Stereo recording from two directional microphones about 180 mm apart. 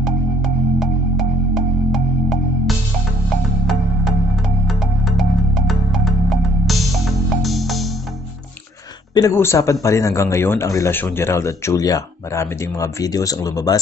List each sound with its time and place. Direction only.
0.0 s music: centre (ahead or behind)
4.6 s music: centre (ahead or behind)
9.1 s a man's voice: 15° left (ahead or behind)